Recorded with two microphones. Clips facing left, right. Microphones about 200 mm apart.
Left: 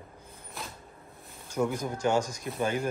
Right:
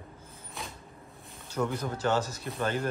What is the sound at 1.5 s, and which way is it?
Speech, 10° left (ahead or behind).